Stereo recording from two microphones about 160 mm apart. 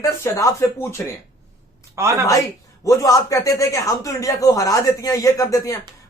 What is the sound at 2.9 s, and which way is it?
Speech, 20° left (ahead or behind).